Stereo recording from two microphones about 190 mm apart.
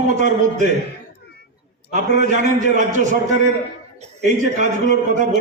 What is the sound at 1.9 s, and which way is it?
A man's voice, 40° right (ahead or behind).